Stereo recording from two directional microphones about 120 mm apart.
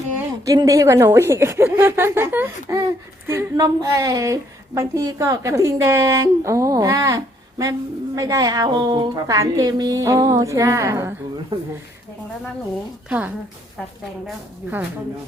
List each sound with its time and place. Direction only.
0.4 s speech: 30° right (ahead or behind)
13.1 s a woman's voice: 15° right (ahead or behind)
14.6 s a woman's voice: 15° right (ahead or behind)